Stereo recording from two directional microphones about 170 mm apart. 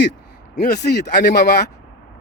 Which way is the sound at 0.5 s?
70° left (ahead or behind).